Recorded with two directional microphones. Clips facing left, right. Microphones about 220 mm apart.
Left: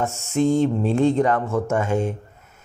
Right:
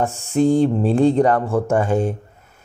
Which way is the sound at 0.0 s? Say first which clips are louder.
Right 3 dB; 30° right (ahead or behind).